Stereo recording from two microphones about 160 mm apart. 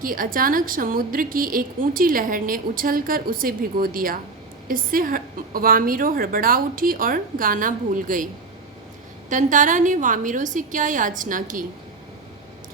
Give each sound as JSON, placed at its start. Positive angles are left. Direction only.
{"t": 0.0, "sound": "a woman's voice", "side_deg": -60}
{"t": 9.3, "sound": "a woman's voice", "side_deg": -55}